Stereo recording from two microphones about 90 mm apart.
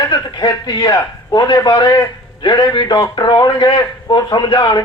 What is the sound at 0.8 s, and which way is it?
A man's voice, 40° left (ahead or behind).